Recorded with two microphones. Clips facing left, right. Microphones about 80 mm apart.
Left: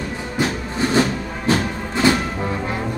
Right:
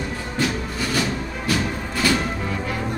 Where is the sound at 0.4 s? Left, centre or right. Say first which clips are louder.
Left 3 dB; left.